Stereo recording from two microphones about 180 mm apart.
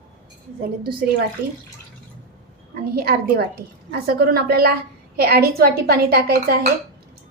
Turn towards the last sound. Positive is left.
turn(degrees=-60)  # may be behind; listen again after turning